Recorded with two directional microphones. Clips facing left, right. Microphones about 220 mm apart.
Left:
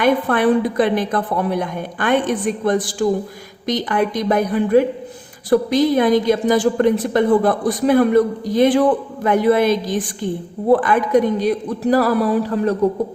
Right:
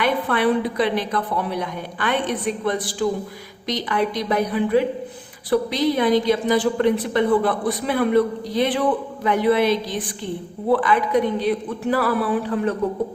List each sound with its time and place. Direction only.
0.0 s a woman's voice: 45° left (ahead or behind)